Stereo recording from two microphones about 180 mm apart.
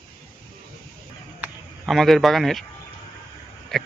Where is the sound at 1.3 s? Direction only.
5° right (ahead or behind).